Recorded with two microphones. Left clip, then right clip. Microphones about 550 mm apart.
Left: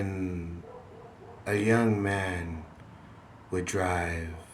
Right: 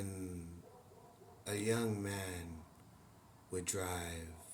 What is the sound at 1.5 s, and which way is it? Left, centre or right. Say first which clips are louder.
Speech: left 12 dB; right.